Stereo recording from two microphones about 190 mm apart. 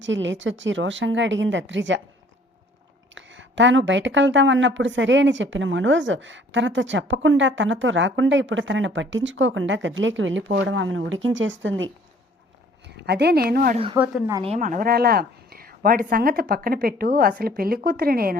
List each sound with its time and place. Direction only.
0.0 s speech: 75° right (ahead or behind)
3.2 s a woman's voice: 75° right (ahead or behind)
13.0 s a woman's voice: 60° right (ahead or behind)
13.7 s speech: 25° right (ahead or behind)
14.0 s a woman's voice: 5° right (ahead or behind)
14.4 s a woman's voice: 40° right (ahead or behind)